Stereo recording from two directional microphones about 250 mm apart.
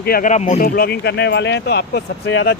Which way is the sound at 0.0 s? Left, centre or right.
Left.